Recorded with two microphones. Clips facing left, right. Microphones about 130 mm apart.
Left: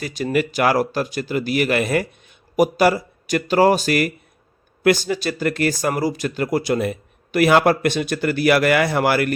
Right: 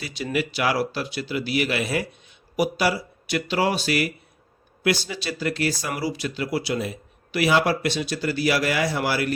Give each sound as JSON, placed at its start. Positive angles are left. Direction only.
{"t": 0.0, "sound": "speech", "side_deg": 45}